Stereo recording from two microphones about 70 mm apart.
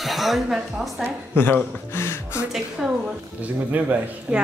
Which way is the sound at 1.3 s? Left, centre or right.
Left.